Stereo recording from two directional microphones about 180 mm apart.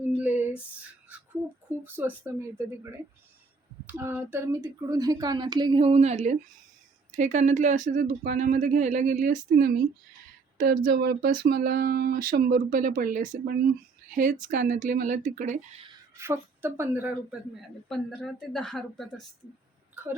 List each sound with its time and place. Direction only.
0.2 s female singing: 10° right (ahead or behind)
1.8 s a woman's voice: 10° right (ahead or behind); by 9.8 s 50° right (ahead or behind)
10.8 s speech: 55° right (ahead or behind)
16.1 s speech: 15° right (ahead or behind)
17.8 s speech: centre (ahead or behind)